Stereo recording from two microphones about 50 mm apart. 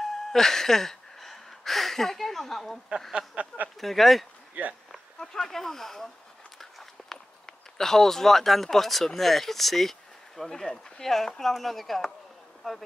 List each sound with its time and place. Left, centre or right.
0.0 s gasp: centre
3.3 s speech: right
3.8 s speech: centre